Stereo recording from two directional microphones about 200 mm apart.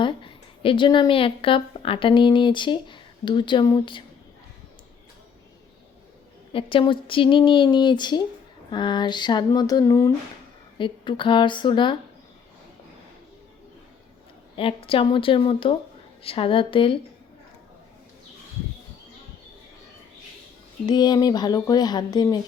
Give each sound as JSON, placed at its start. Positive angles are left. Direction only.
{"t": 0.0, "sound": "a woman's voice", "side_deg": 25}
{"t": 6.5, "sound": "speech", "side_deg": 25}
{"t": 14.5, "sound": "speech", "side_deg": 25}
{"t": 20.8, "sound": "speech", "side_deg": 20}